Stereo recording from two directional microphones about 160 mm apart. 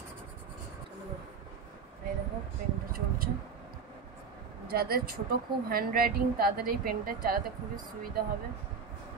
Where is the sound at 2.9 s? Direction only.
65° right (ahead or behind).